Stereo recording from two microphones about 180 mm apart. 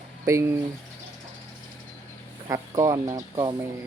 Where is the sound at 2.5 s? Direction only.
20° right (ahead or behind).